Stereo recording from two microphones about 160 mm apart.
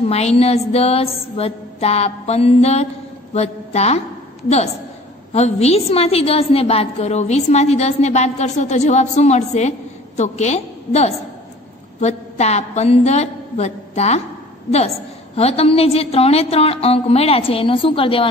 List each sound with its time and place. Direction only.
0.1 s a woman's voice: 40° left (ahead or behind)
15.3 s a woman's voice: 40° left (ahead or behind)